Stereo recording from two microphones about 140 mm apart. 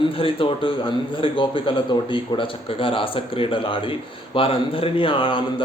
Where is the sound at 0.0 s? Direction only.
40° left (ahead or behind).